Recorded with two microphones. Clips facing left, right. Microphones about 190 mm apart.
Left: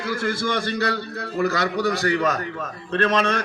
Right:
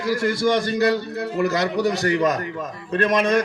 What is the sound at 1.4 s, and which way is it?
A man's voice, 15° right (ahead or behind).